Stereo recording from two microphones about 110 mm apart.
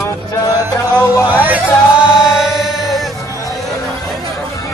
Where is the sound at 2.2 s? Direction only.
Centre (ahead or behind).